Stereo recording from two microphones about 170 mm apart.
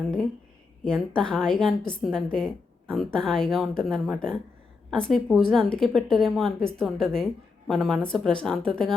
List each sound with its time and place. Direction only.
0.9 s a woman's voice: 5° left (ahead or behind)